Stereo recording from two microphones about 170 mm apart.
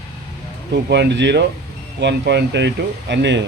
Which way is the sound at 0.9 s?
90° right.